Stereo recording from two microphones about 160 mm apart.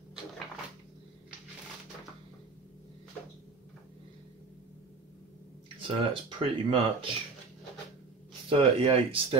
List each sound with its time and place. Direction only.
5.8 s speech: 35° right (ahead or behind)
8.5 s speech: 35° right (ahead or behind)